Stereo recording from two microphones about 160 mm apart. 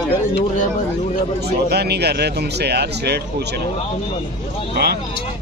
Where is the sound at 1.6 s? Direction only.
90° right.